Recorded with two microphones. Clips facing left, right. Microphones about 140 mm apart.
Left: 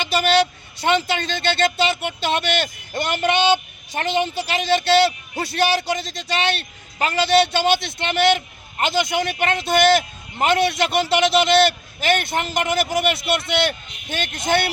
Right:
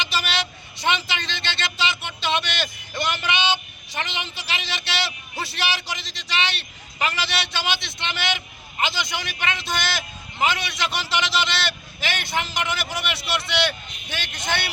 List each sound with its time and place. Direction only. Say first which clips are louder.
0.8 s speech: left 5 dB; 45° left (ahead or behind)